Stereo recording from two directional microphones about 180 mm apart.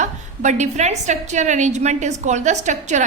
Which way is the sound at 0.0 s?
40° right (ahead or behind).